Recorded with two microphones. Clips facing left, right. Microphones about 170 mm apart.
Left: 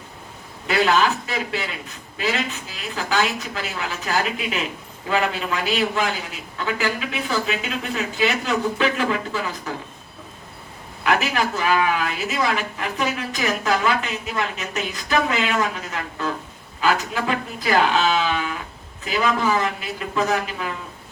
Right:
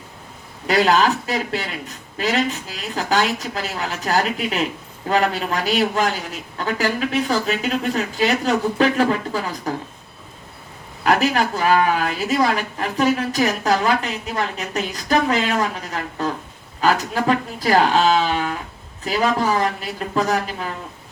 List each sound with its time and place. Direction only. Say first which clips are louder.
0.7 s speech: right 2 dB; 35° right (ahead or behind)
11.0 s speech: right 3 dB; 40° right (ahead or behind)